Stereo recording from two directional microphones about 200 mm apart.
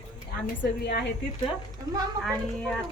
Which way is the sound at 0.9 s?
55° left (ahead or behind).